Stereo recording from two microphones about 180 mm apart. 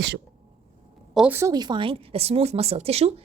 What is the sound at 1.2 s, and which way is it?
A woman's voice, 10° right (ahead or behind).